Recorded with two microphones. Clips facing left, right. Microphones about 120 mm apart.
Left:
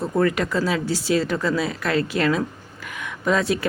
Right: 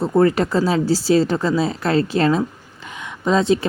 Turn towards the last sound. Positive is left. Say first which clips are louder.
# right 4 dB
turn(degrees=-25)  # may be behind; listen again after turning